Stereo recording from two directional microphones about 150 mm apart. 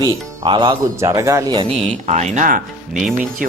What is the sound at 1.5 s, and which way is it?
Speech, 35° right (ahead or behind).